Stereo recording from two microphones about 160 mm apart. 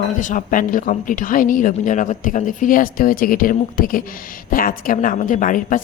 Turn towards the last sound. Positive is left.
turn(degrees=55)  # may be behind; listen again after turning